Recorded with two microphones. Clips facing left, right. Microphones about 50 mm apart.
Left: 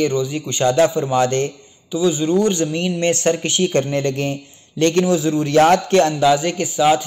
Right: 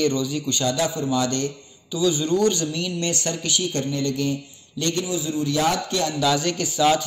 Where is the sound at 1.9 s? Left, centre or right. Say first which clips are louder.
Left 4 dB; left.